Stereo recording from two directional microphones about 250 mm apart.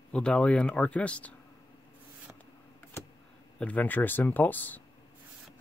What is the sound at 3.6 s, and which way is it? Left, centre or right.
Speech, centre.